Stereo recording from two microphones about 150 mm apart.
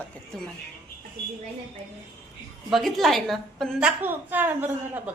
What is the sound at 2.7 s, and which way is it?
A woman's voice, centre (ahead or behind).